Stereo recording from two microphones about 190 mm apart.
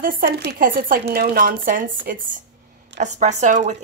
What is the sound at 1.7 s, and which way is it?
Speech, 45° right (ahead or behind).